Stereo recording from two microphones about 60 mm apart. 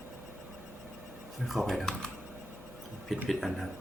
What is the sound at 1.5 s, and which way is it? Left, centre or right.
Speech, centre.